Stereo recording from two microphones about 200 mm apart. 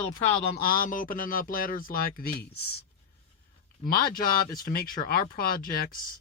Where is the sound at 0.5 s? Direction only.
45° left (ahead or behind).